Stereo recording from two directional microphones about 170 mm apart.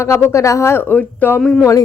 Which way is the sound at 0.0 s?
15° left (ahead or behind).